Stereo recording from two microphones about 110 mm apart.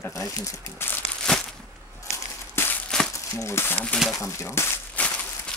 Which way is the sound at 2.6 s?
20° left (ahead or behind).